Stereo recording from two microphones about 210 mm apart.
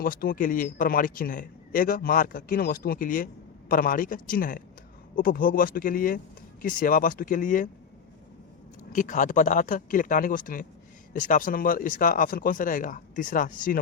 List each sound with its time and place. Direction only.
0.0 s speech: 45° left (ahead or behind)
8.9 s speech: 40° left (ahead or behind)